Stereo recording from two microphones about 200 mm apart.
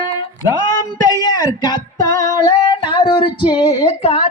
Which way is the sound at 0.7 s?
20° left (ahead or behind).